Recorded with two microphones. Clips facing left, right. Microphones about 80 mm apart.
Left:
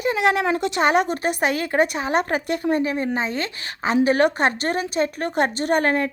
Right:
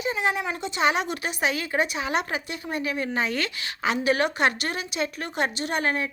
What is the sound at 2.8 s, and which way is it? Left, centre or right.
A woman's voice, left.